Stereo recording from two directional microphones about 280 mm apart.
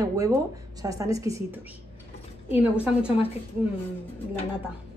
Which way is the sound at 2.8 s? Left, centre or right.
Centre.